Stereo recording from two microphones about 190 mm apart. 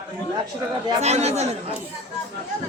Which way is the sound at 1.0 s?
35° right (ahead or behind).